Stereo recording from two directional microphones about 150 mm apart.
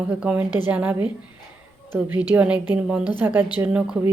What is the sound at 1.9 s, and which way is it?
Speech, 10° right (ahead or behind).